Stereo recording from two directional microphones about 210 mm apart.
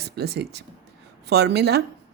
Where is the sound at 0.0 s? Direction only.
50° right (ahead or behind).